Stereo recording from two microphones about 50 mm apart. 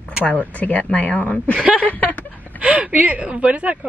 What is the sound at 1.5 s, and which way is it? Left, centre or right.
Speech, centre.